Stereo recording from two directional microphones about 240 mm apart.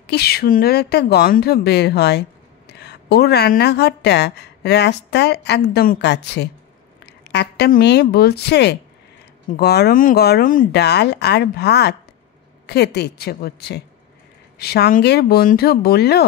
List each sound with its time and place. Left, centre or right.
0.0 s speech: left